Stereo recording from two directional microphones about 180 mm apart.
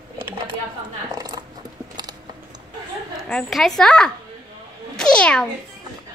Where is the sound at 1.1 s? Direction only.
20° right (ahead or behind).